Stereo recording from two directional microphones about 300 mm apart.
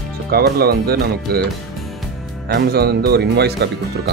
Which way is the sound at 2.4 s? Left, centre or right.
Right.